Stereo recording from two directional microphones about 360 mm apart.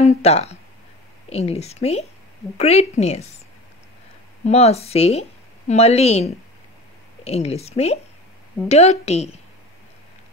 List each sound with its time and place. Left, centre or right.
0.0 s a woman's voice: centre
4.5 s a woman's voice: centre